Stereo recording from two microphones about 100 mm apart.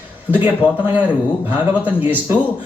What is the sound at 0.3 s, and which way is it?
Speech, 15° right (ahead or behind).